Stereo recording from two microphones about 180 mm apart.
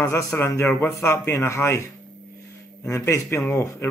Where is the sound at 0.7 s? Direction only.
5° left (ahead or behind).